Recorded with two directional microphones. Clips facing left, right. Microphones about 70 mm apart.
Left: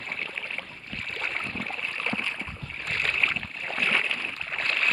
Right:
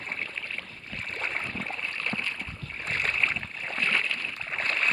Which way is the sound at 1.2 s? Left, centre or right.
Centre.